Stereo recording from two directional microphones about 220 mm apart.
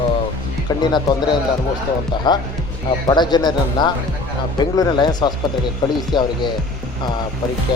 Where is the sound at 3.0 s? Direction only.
20° left (ahead or behind).